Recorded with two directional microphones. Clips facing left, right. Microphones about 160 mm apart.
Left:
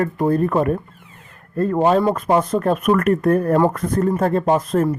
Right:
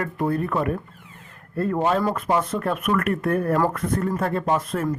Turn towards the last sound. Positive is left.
turn(degrees=40)  # may be behind; listen again after turning